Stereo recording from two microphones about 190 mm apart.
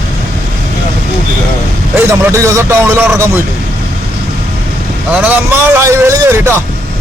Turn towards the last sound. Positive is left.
turn(degrees=-15)  # may be behind; listen again after turning